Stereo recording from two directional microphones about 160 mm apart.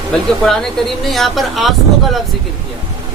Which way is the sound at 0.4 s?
Centre (ahead or behind).